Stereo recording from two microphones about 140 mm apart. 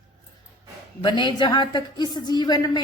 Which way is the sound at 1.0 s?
35° left (ahead or behind).